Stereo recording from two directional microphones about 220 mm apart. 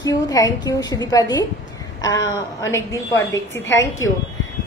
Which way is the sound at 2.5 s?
15° left (ahead or behind).